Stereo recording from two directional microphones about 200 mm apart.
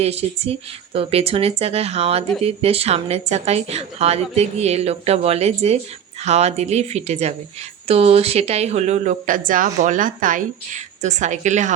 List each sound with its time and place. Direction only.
0.0 s speech: 30° right (ahead or behind)